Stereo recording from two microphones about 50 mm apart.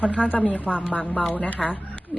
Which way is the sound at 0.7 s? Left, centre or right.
Centre.